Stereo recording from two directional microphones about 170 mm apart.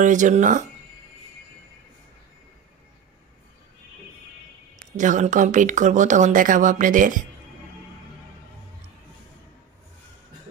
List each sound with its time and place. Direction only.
0.0 s speech: 45° right (ahead or behind)
4.7 s speech: 50° right (ahead or behind)